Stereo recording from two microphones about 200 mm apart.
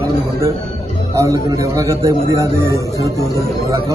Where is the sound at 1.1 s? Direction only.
15° right (ahead or behind).